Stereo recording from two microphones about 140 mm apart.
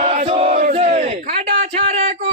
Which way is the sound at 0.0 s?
50° right (ahead or behind).